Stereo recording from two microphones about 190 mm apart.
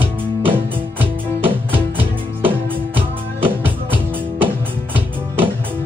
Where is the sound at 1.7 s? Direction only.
10° right (ahead or behind).